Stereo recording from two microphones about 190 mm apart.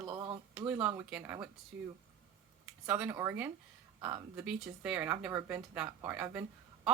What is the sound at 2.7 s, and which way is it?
Speech, 5° right (ahead or behind).